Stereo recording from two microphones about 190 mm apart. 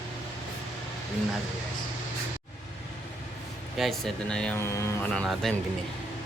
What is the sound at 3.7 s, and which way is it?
Speech, centre (ahead or behind).